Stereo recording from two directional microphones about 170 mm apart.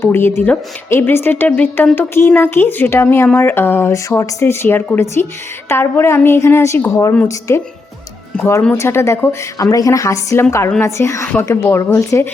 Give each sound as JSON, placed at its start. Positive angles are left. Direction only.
{"t": 0.0, "sound": "a woman's voice", "side_deg": 15}